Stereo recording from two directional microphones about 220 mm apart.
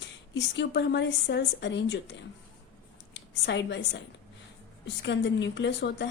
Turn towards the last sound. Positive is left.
turn(degrees=50)  # may be behind; listen again after turning